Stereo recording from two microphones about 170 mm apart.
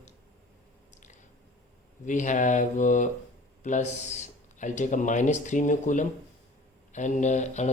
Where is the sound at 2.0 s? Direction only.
45° left (ahead or behind).